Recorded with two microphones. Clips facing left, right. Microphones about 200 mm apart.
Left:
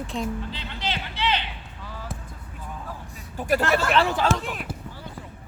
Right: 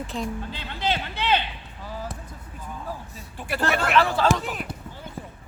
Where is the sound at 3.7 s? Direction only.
30° left (ahead or behind).